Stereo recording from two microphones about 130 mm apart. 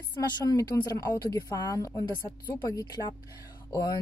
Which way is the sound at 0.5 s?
30° left (ahead or behind).